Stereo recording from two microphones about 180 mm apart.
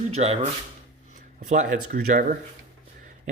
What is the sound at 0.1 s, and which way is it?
Speech, 35° right (ahead or behind).